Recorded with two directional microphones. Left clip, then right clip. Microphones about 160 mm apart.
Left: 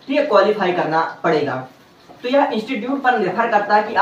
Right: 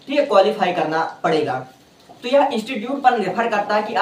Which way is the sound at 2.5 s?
20° right (ahead or behind).